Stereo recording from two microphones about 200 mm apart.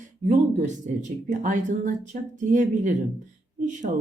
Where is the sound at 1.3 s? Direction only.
40° right (ahead or behind).